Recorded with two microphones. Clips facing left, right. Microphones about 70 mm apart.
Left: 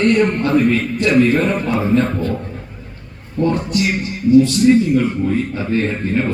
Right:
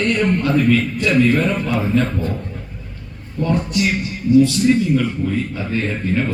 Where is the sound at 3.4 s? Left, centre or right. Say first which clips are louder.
Left 1 dB; left.